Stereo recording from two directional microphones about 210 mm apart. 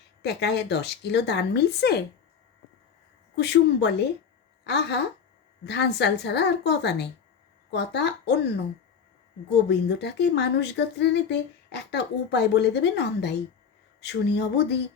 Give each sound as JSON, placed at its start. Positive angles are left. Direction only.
{"t": 0.2, "sound": "speech", "side_deg": 55}
{"t": 3.3, "sound": "speech", "side_deg": 55}
{"t": 9.6, "sound": "speech", "side_deg": 55}